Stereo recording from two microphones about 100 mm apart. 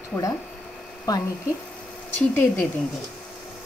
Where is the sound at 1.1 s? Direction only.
35° left (ahead or behind).